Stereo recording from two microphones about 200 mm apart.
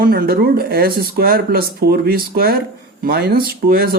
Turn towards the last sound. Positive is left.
turn(degrees=-50)  # may be behind; listen again after turning